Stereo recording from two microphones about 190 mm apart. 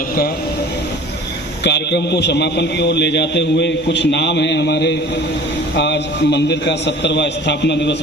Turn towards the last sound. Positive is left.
turn(degrees=65)  # may be behind; listen again after turning